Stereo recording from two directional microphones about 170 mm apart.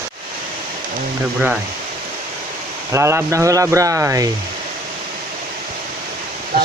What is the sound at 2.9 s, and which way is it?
Speech, 15° right (ahead or behind).